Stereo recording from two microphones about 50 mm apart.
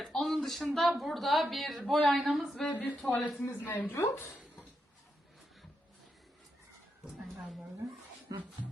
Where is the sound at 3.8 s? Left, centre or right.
Left.